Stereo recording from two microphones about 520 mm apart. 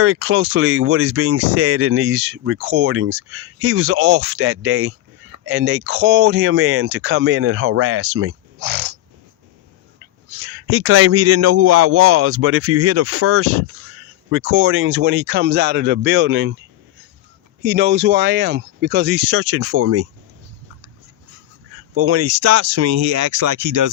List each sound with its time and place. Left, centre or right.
0.0 s speech: right
10.4 s speech: right
17.6 s speech: centre
21.9 s speech: right